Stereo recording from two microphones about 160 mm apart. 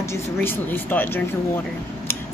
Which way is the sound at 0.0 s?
15° left (ahead or behind).